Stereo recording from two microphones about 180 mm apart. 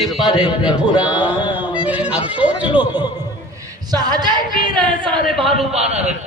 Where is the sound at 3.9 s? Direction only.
20° right (ahead or behind).